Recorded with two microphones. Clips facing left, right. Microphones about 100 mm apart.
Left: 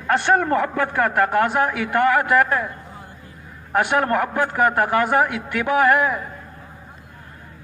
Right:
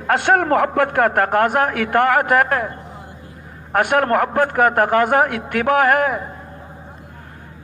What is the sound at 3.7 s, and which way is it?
A man's voice, 50° right (ahead or behind).